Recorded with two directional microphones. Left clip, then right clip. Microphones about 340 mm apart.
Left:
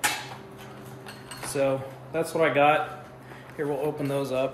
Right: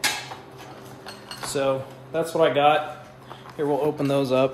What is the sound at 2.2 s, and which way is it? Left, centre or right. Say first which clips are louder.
Speech: right 2 dB; centre.